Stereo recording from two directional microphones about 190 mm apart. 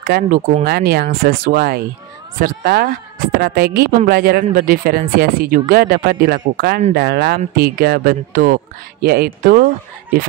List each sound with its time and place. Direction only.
0.0 s speech: 50° right (ahead or behind)
0.7 s speech: 55° right (ahead or behind)